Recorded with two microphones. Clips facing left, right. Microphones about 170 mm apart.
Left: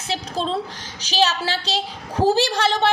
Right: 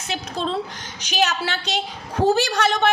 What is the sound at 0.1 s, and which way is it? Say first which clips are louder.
A woman's voice: left 1 dB; 35° left (ahead or behind).